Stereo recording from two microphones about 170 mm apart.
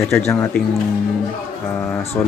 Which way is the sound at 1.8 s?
10° left (ahead or behind).